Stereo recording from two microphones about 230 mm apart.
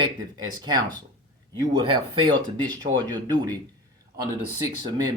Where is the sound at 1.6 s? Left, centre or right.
Centre.